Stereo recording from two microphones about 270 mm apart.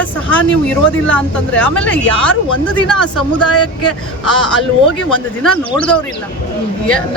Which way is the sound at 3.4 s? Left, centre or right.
Left.